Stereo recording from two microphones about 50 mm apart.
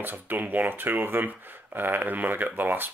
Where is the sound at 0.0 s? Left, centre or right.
Right.